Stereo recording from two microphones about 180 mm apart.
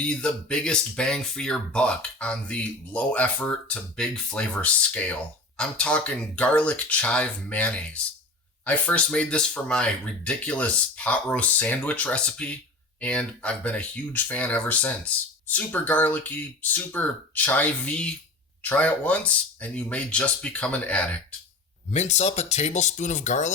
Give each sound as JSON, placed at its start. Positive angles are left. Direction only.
{"t": 0.0, "sound": "speech", "side_deg": 5}
{"t": 21.8, "sound": "speech", "side_deg": 40}